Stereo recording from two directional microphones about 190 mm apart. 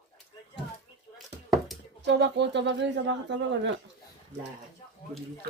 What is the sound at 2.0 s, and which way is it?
Speech, 65° right (ahead or behind).